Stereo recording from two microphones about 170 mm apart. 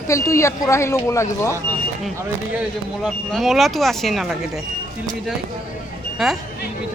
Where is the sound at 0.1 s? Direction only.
20° left (ahead or behind).